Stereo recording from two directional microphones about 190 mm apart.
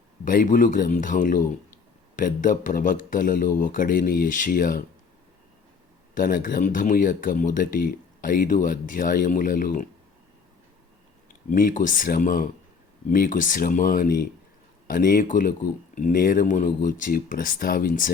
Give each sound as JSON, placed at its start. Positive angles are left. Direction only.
{"t": 0.3, "sound": "speech", "side_deg": 45}
{"t": 6.1, "sound": "speech", "side_deg": 45}
{"t": 11.5, "sound": "speech", "side_deg": 45}